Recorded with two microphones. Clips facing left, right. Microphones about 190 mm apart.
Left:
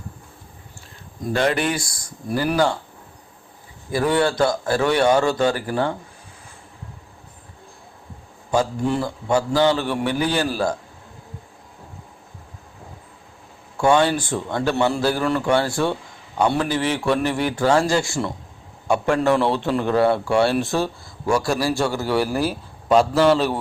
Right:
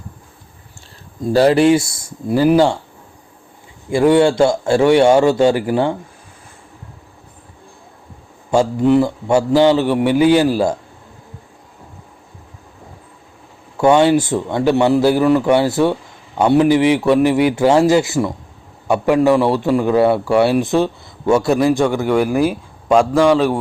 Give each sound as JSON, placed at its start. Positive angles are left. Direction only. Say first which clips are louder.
{"t": 1.2, "sound": "a man's voice", "louder": "right 9 dB", "side_deg": -35}
{"t": 3.8, "sound": "a man's voice", "louder": "right 8 dB", "side_deg": -20}
{"t": 9.0, "sound": "a man's voice", "louder": "right 7 dB", "side_deg": -20}
{"t": 13.7, "sound": "a man's voice", "louder": "right 6 dB", "side_deg": -20}
{"t": 22.9, "sound": "a man's voice", "louder": "right 3 dB", "side_deg": 0}
{"t": 23.3, "sound": "speech", "louder": "right 5 dB", "side_deg": -10}